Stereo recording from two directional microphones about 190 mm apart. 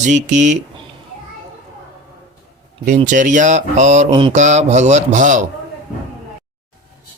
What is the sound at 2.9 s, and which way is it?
Speech, 40° right (ahead or behind).